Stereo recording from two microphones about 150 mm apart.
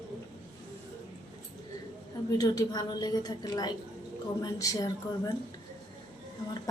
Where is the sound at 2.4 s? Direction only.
25° left (ahead or behind).